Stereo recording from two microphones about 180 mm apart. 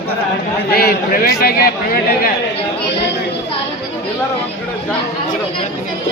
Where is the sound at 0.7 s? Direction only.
60° left (ahead or behind).